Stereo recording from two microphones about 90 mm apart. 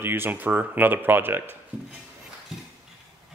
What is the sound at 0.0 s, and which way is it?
Speech, 25° right (ahead or behind).